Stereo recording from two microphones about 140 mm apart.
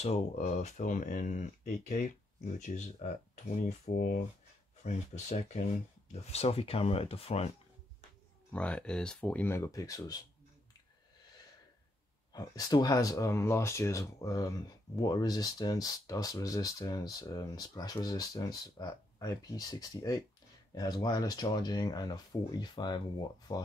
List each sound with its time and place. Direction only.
0.0 s speech: 50° left (ahead or behind)
8.5 s speech: 10° left (ahead or behind); by 10.2 s 25° left (ahead or behind)
12.3 s speech: 25° left (ahead or behind)